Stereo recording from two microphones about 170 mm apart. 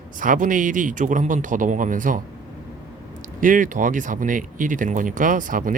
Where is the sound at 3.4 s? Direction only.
50° right (ahead or behind).